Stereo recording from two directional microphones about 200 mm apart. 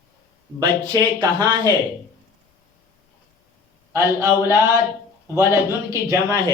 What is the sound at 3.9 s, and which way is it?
A man's voice, 10° right (ahead or behind).